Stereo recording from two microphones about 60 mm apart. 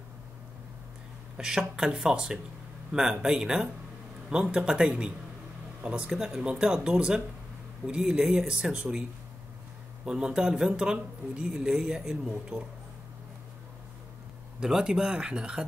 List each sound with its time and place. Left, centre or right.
1.4 s speech: centre
10.0 s speech: centre
14.6 s speech: centre